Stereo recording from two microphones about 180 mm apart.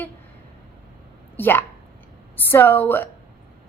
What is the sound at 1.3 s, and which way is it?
A woman's voice, 10° left (ahead or behind).